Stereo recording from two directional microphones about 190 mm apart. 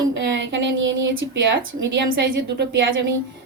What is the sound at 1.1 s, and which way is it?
Speech, 65° right (ahead or behind).